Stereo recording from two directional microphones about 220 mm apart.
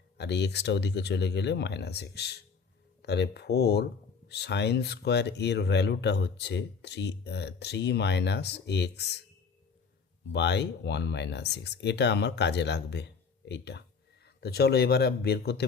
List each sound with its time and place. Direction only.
0.2 s speech: 50° left (ahead or behind)
10.3 s speech: 50° left (ahead or behind)